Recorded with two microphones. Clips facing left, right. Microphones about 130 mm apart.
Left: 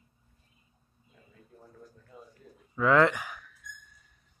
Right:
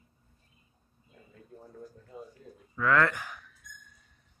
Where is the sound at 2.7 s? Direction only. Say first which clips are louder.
Left 3 dB; 20° left (ahead or behind).